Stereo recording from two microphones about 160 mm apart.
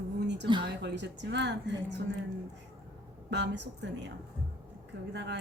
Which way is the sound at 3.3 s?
90° right.